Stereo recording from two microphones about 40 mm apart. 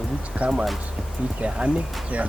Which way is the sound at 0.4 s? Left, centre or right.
Right.